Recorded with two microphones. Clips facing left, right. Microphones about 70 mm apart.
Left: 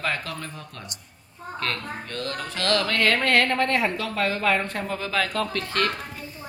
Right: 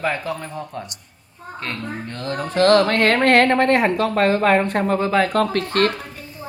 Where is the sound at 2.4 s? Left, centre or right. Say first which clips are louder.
Right 11 dB; right.